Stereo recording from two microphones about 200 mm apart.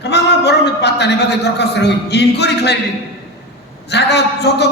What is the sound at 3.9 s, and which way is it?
Speech, 55° left (ahead or behind).